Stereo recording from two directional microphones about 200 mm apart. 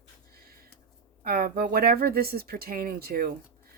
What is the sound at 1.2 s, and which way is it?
Speech, 50° right (ahead or behind).